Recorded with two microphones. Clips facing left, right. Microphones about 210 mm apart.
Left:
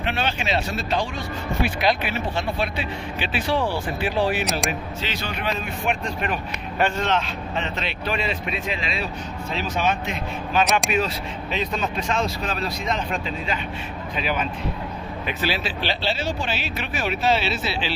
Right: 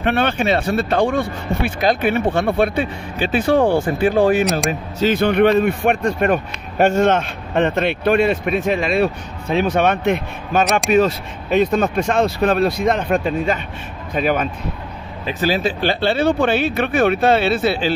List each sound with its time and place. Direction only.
0.0 s speech: 55° right (ahead or behind)
10.6 s speech: centre (ahead or behind)
10.9 s speech: 45° right (ahead or behind)